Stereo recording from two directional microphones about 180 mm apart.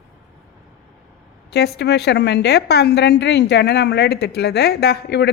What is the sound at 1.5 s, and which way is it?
A woman's voice, 65° left (ahead or behind).